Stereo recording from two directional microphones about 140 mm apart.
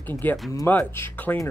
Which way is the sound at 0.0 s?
15° left (ahead or behind).